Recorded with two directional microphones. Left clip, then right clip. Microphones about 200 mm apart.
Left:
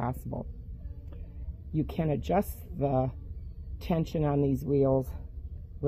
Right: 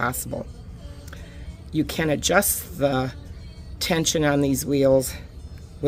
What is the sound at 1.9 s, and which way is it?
Speech, 15° left (ahead or behind).